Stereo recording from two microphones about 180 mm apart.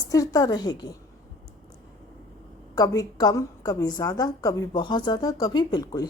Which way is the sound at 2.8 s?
20° left (ahead or behind).